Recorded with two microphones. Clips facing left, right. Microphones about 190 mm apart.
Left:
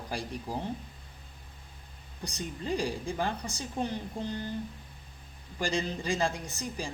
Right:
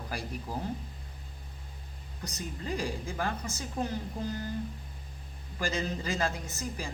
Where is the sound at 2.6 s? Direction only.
25° left (ahead or behind).